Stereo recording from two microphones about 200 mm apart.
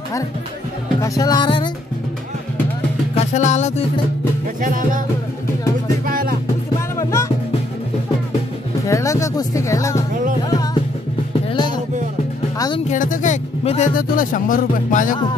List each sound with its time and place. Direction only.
1.0 s music: 20° left (ahead or behind)
3.2 s music: 35° left (ahead or behind)
4.6 s music: 40° right (ahead or behind)
6.0 s music: 45° right (ahead or behind)
7.0 s music: 15° left (ahead or behind)
8.8 s music: 15° left (ahead or behind)
11.5 s music: 20° left (ahead or behind)
12.9 s speech: 40° left (ahead or behind)